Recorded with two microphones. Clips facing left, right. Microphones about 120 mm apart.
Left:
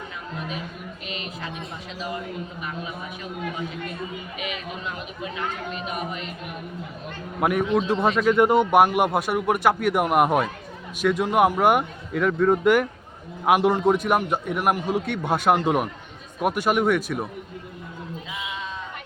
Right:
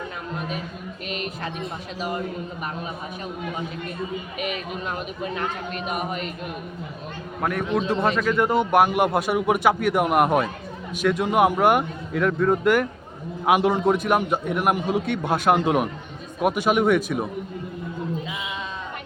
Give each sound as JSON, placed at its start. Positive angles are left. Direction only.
{"t": 1.0, "sound": "music", "side_deg": -50}
{"t": 2.0, "sound": "speech", "side_deg": -50}
{"t": 4.4, "sound": "speech", "side_deg": -50}
{"t": 7.4, "sound": "a man's voice", "side_deg": 10}
{"t": 8.5, "sound": "a man's voice", "side_deg": 0}
{"t": 14.5, "sound": "speech", "side_deg": 5}
{"t": 14.8, "sound": "a man's voice", "side_deg": -15}